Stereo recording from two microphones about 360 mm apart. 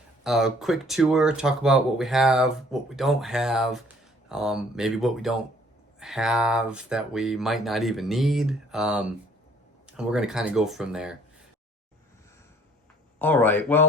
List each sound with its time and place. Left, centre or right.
0.3 s speech: centre
13.1 s speech: centre